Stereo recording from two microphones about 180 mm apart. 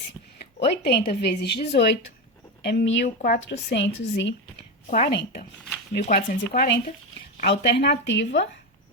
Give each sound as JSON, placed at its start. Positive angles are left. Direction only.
{"t": 0.6, "sound": "a woman's voice", "side_deg": 65}
{"t": 4.9, "sound": "a woman's voice", "side_deg": 50}